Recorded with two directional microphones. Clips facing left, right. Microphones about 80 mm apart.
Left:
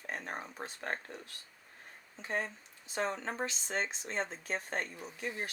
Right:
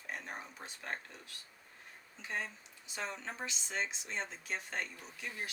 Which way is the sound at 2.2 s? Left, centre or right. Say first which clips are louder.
Left 4 dB; left.